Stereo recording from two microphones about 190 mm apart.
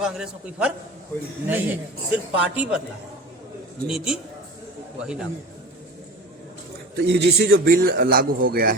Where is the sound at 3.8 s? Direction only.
5° right (ahead or behind).